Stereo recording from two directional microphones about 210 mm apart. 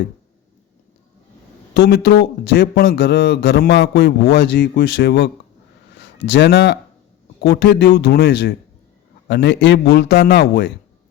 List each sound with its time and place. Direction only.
1.7 s a man's voice: 50° left (ahead or behind)